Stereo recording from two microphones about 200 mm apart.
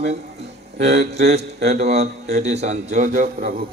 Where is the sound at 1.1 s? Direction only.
35° right (ahead or behind).